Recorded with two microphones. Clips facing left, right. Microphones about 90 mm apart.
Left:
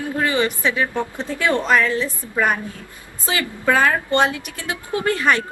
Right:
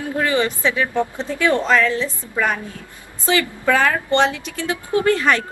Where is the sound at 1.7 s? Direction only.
15° left (ahead or behind).